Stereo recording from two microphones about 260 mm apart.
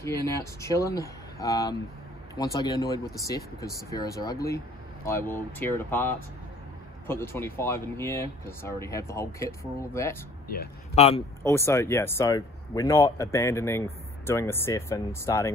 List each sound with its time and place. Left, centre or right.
0.0 s speech: centre
11.0 s speech: left
11.4 s speech: centre